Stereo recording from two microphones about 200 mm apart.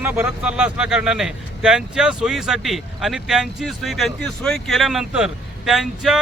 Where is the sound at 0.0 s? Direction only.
10° right (ahead or behind).